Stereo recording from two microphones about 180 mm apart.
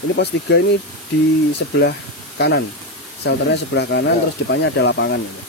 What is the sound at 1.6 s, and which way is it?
Speech, 80° left.